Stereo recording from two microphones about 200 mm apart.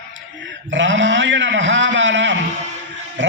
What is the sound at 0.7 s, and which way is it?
A man's voice, 65° right (ahead or behind).